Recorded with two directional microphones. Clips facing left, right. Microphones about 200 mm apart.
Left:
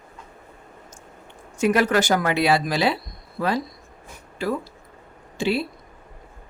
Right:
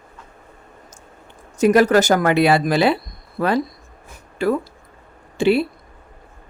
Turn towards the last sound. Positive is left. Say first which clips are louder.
# right 7 dB
turn(degrees=-60)  # may be behind; listen again after turning